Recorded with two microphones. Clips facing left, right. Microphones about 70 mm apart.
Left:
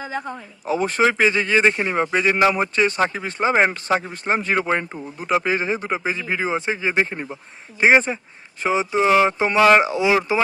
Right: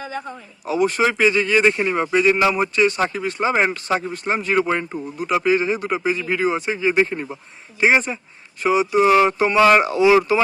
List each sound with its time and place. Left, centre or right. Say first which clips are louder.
0.6 s speech: even; left